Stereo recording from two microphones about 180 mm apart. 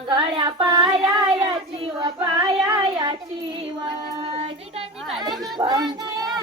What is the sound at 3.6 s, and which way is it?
Music, 25° right (ahead or behind).